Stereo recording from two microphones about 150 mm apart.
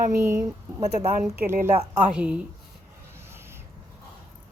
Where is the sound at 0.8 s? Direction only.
45° right (ahead or behind).